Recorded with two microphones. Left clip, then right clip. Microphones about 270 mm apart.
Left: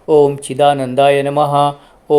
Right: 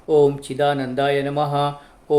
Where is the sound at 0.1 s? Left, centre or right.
Left.